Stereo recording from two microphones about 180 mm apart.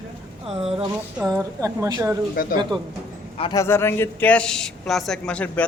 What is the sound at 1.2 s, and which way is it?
Speech, 20° right (ahead or behind).